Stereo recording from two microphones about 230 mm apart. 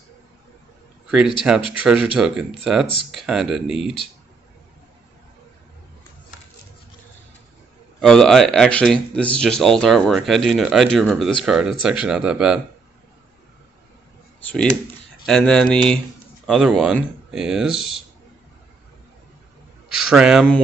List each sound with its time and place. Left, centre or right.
1.0 s a sound: centre
1.7 s speech: centre
3.8 s speech: left
8.0 s speech: centre
15.2 s speech: centre
19.9 s speech: centre